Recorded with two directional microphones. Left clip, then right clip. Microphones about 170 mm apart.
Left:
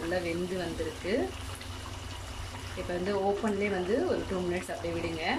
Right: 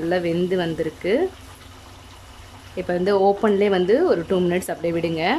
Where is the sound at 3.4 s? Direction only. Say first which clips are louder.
Right 13 dB; 55° right (ahead or behind).